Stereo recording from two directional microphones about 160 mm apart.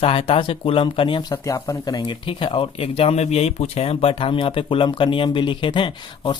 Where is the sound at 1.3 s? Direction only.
20° left (ahead or behind).